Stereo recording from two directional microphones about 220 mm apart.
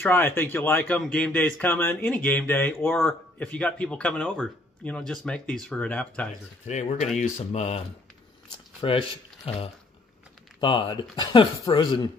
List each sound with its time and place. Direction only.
0.0 s speech: 10° left (ahead or behind)
6.7 s speech: 30° left (ahead or behind)
8.8 s speech: 25° left (ahead or behind)